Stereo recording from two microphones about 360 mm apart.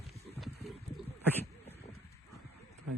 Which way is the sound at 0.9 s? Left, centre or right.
Centre.